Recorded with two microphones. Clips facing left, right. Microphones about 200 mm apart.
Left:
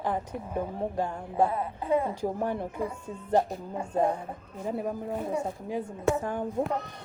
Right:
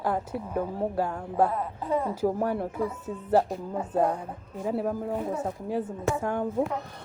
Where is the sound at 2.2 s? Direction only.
10° right (ahead or behind).